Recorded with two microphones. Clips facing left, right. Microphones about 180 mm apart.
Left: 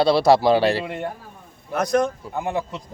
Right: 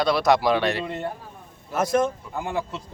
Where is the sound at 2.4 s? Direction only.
20° left (ahead or behind).